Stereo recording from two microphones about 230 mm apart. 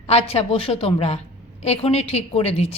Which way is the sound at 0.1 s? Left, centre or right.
Left.